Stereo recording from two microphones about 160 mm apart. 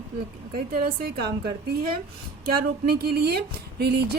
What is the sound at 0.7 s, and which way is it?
Speech, 70° right (ahead or behind).